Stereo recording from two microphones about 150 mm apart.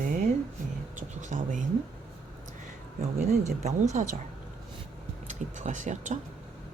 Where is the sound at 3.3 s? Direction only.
50° right (ahead or behind).